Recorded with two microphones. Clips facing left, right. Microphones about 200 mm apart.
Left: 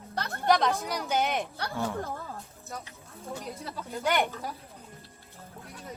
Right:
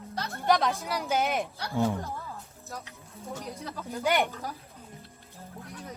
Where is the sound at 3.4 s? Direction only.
Centre (ahead or behind).